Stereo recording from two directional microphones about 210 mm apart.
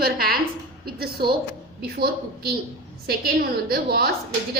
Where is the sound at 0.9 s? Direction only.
50° right (ahead or behind).